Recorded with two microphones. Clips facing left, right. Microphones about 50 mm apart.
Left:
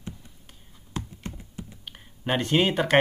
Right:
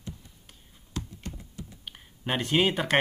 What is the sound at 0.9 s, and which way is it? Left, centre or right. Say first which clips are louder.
Computer keyboard: left 2 dB; left.